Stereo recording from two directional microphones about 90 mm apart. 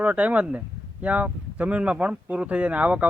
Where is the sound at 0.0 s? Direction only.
15° right (ahead or behind).